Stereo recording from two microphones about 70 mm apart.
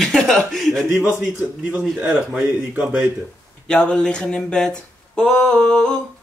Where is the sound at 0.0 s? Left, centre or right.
Centre.